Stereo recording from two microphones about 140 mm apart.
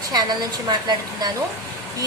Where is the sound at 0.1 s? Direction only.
30° right (ahead or behind).